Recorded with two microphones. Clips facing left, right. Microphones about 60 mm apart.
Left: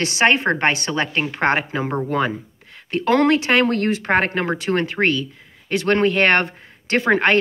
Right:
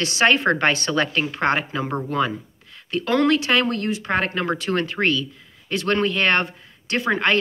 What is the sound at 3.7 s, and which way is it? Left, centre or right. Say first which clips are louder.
Speech: left 5 dB; left.